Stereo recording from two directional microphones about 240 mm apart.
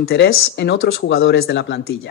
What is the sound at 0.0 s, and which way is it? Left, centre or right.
Speech, left.